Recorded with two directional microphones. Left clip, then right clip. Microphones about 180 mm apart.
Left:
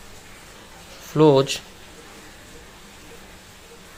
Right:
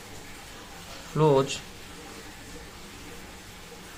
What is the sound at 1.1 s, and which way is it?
Speech, 45° left (ahead or behind).